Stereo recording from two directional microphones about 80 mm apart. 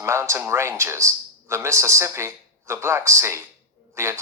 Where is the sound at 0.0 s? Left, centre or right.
Right.